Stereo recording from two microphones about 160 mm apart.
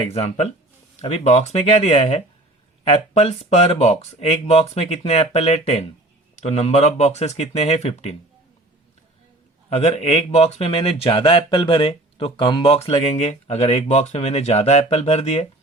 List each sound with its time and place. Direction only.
1.0 s speech: 45° left (ahead or behind)
9.6 s speech: 40° left (ahead or behind)